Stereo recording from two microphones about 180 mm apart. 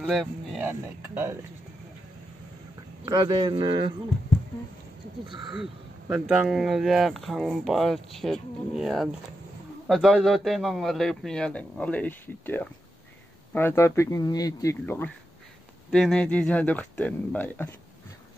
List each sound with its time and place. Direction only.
0.0 s speech: centre (ahead or behind)
3.1 s speech: 25° right (ahead or behind)
5.6 s speech: 5° right (ahead or behind); by 15.0 s 15° left (ahead or behind)
15.9 s speech: 5° left (ahead or behind)